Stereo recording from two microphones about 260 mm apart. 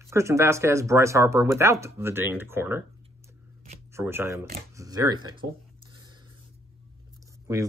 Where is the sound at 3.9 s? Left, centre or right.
Centre.